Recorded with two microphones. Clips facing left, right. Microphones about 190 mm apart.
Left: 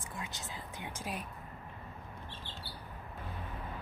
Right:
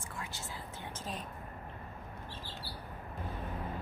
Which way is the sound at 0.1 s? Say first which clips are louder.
Left 1 dB; 15° left (ahead or behind).